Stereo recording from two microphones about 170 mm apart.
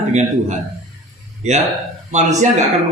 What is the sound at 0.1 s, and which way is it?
A man's voice, 45° right (ahead or behind).